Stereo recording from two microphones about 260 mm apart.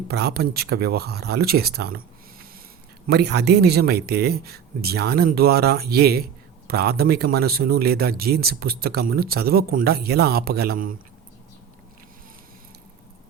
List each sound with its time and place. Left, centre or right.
0.1 s speech: right
3.1 s speech: right